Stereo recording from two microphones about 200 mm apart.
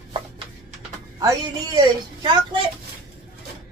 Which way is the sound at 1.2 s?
20° right (ahead or behind).